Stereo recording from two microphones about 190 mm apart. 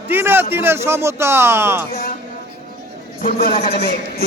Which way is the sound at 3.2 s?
50° left (ahead or behind).